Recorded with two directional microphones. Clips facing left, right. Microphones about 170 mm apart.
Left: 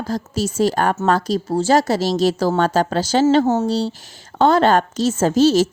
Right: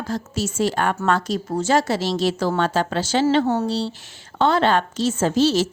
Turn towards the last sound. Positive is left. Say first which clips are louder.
# left 4 dB
turn(degrees=45)  # may be behind; listen again after turning